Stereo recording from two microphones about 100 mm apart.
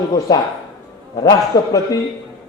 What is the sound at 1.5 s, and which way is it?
Speech, 40° left (ahead or behind).